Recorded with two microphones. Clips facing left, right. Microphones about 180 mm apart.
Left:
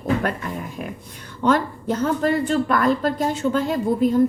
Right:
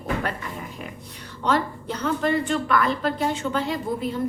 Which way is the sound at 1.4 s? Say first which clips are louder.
Left 4 dB; 50° left (ahead or behind).